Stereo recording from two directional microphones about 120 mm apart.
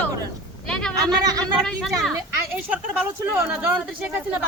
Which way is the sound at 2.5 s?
15° right (ahead or behind).